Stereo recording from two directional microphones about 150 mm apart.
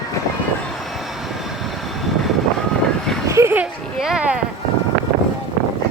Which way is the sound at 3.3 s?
15° right (ahead or behind).